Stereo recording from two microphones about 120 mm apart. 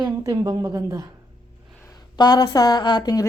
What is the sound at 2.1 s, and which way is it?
Speech, 35° left (ahead or behind).